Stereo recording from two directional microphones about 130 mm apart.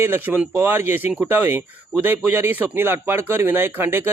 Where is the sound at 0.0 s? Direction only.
15° right (ahead or behind).